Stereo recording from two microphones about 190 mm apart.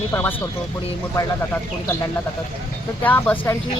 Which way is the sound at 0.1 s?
10° left (ahead or behind).